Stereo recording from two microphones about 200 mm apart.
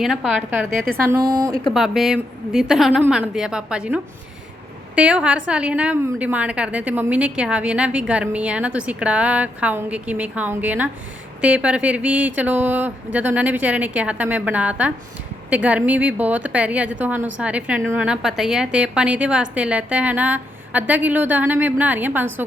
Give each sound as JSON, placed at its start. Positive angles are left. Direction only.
{"t": 0.0, "sound": "a woman's voice", "side_deg": 0}
{"t": 1.7, "sound": "a woman's voice", "side_deg": 0}